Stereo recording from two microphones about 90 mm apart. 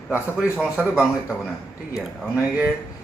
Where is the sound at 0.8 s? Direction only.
10° right (ahead or behind).